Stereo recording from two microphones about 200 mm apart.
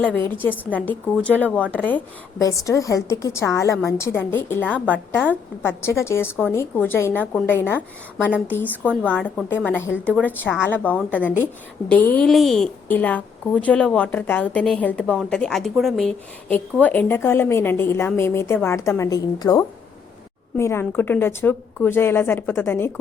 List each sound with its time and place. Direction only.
0.7 s a woman's voice: 5° left (ahead or behind)